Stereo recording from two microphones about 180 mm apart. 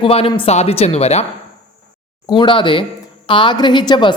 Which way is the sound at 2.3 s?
25° left (ahead or behind).